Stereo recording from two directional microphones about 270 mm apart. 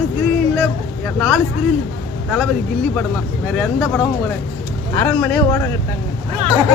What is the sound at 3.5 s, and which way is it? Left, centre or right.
Speech, centre.